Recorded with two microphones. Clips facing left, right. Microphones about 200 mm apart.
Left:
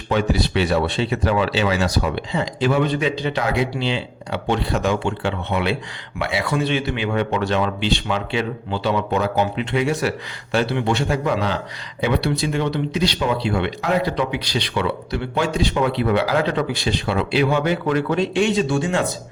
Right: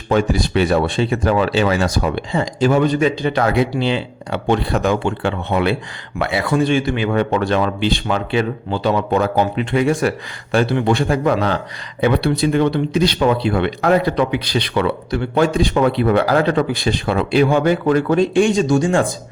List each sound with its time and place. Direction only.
0.1 s speech: 45° right (ahead or behind)